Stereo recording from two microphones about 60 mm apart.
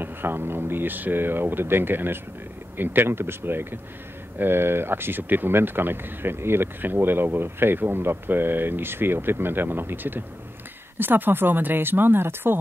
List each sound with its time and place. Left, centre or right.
0.0 s speech: right